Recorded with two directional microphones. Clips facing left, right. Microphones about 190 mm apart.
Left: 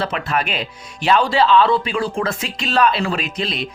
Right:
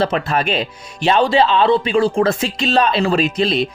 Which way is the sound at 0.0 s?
30° right (ahead or behind).